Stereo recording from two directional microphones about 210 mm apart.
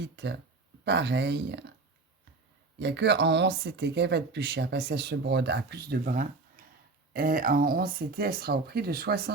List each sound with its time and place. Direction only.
0.9 s speech: 55° right (ahead or behind)
2.7 s speech: 55° right (ahead or behind)